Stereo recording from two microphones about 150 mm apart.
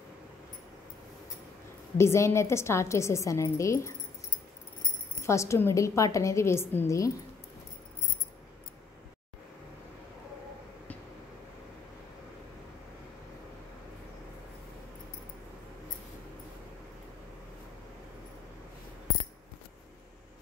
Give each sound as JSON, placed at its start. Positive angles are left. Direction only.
{"t": 2.0, "sound": "a woman's voice", "side_deg": 20}
{"t": 5.2, "sound": "a woman's voice", "side_deg": 20}